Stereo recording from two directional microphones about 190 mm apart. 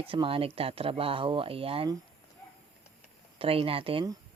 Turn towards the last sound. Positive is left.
turn(degrees=-30)  # may be behind; listen again after turning